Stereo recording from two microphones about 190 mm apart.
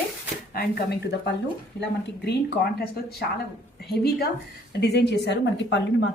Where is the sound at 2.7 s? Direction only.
55° left (ahead or behind).